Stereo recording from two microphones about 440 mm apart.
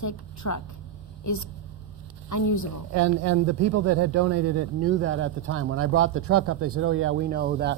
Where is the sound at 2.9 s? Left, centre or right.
Right.